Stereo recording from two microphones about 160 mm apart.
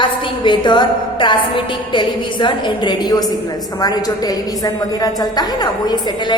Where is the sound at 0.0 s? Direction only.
30° left (ahead or behind).